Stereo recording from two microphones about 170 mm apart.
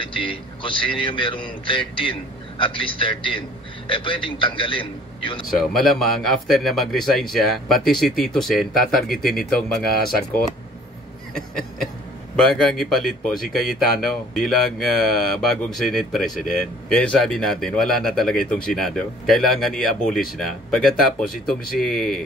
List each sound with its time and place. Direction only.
0.0 s a man's voice: 30° left (ahead or behind)
5.6 s speech: centre (ahead or behind)
12.4 s speech: centre (ahead or behind)